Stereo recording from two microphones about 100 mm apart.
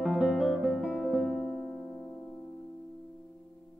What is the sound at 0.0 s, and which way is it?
Music, centre (ahead or behind).